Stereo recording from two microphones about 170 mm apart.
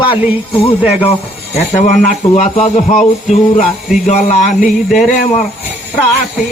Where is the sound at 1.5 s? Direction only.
45° left (ahead or behind).